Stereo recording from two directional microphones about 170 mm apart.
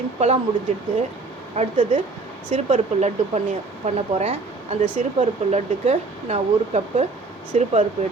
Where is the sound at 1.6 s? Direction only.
35° right (ahead or behind).